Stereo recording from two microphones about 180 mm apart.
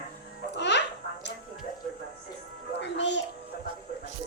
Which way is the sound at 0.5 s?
75° left (ahead or behind).